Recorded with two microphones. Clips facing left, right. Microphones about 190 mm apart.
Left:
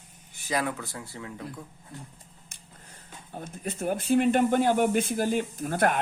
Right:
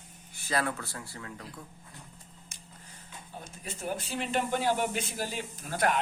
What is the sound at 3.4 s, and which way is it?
Speech, 55° left (ahead or behind).